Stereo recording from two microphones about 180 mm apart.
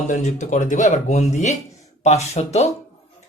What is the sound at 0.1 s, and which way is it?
Speech, 40° left (ahead or behind).